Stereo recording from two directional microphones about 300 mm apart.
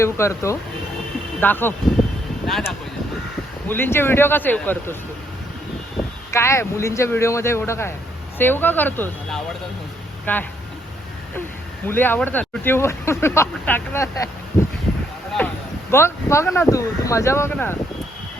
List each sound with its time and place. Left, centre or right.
0.0 s speech: centre
6.3 s speech: centre
11.9 s speech: centre
15.9 s speech: centre